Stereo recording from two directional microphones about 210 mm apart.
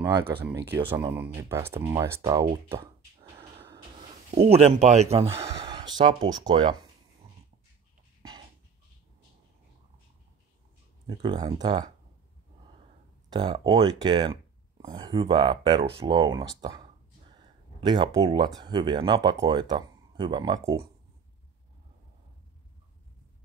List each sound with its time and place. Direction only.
0.0 s speech: 20° right (ahead or behind)
0.7 s speech: 10° right (ahead or behind)
4.4 s speech: 30° right (ahead or behind)
5.3 s speech: 15° right (ahead or behind)
8.2 s dog: 20° right (ahead or behind)
11.1 s speech: 20° right (ahead or behind)
13.3 s speech: 20° right (ahead or behind)
17.7 s speech: 20° right (ahead or behind)